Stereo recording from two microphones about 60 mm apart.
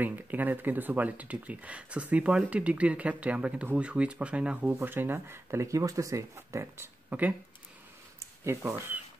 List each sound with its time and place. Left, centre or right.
0.0 s speech: right
4.8 s speech: right
7.1 s speech: right
8.2 s a sound: right